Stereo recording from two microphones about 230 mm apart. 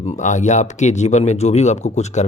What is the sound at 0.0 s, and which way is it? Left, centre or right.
Speech, left.